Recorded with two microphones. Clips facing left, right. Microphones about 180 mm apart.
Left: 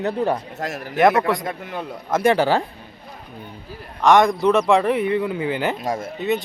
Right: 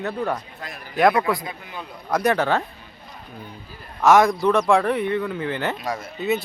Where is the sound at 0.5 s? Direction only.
90° left.